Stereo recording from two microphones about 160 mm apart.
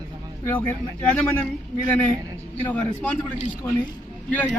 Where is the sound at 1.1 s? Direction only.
10° left (ahead or behind).